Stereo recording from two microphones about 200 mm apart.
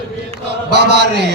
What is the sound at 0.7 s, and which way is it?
Chant, 55° right (ahead or behind).